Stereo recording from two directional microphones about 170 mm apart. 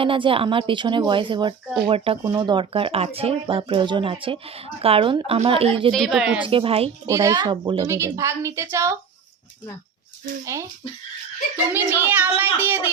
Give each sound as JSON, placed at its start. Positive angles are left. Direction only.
{"t": 0.0, "sound": "speech", "side_deg": -30}
{"t": 5.9, "sound": "speech", "side_deg": 0}
{"t": 6.4, "sound": "speech", "side_deg": -30}
{"t": 7.1, "sound": "speech", "side_deg": -20}
{"t": 7.9, "sound": "a child's voice", "side_deg": -15}
{"t": 10.4, "sound": "a child's voice", "side_deg": -15}
{"t": 11.7, "sound": "a child's voice", "side_deg": -10}